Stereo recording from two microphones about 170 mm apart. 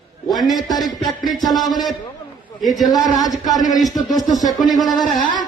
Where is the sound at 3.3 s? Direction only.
Centre (ahead or behind).